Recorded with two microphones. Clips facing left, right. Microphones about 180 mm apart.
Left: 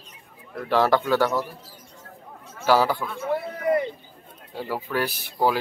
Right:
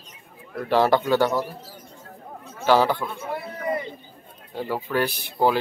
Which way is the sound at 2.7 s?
5° left (ahead or behind).